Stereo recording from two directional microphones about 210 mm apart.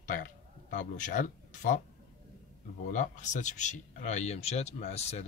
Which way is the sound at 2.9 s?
35° left (ahead or behind).